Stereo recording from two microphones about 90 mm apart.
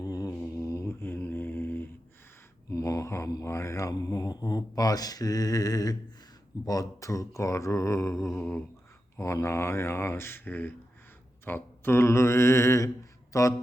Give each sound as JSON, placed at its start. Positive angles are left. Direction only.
{"t": 0.0, "sound": "mantra", "side_deg": 40}
{"t": 2.6, "sound": "mantra", "side_deg": 35}
{"t": 6.7, "sound": "speech", "side_deg": 40}